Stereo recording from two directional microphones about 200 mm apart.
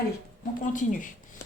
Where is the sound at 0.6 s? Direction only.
40° left (ahead or behind).